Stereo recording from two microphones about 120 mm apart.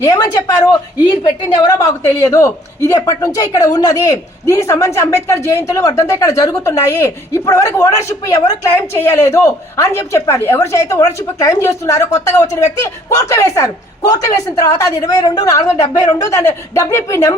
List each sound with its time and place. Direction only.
0.0 s a woman's voice: 30° left (ahead or behind)
1.6 s speech: 25° left (ahead or behind)
13.1 s a woman's voice: 25° left (ahead or behind)